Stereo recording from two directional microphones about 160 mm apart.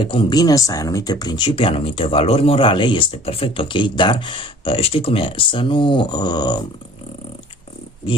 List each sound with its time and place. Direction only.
0.0 s speech: 30° left (ahead or behind)